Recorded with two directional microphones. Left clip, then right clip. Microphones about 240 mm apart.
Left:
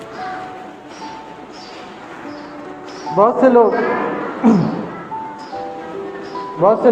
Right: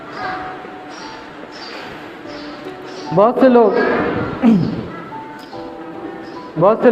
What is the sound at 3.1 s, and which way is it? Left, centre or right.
Speech, right.